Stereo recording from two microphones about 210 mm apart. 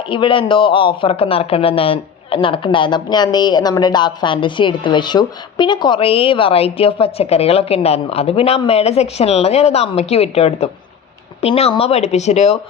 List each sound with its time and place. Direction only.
0.1 s speech: 25° left (ahead or behind)